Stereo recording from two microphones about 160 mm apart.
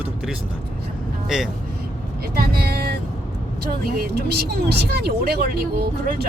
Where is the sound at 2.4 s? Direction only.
75° right (ahead or behind).